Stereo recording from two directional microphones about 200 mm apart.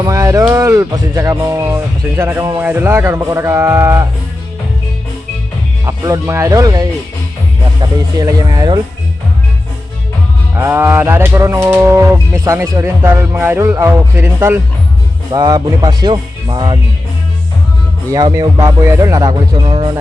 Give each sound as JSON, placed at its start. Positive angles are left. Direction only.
{"t": 0.0, "sound": "music", "side_deg": -15}
{"t": 5.8, "sound": "music", "side_deg": -15}
{"t": 7.8, "sound": "speech", "side_deg": -20}
{"t": 10.5, "sound": "music", "side_deg": -10}
{"t": 15.3, "sound": "speech", "side_deg": -20}
{"t": 18.1, "sound": "music", "side_deg": -15}
{"t": 19.6, "sound": "speech", "side_deg": -25}